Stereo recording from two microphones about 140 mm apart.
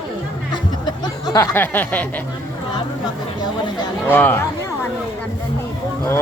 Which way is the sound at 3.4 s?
30° left (ahead or behind).